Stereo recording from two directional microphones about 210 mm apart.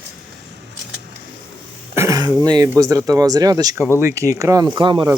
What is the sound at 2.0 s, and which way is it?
Speech, 15° right (ahead or behind).